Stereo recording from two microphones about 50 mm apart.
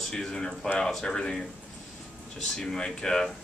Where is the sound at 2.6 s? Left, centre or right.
Centre.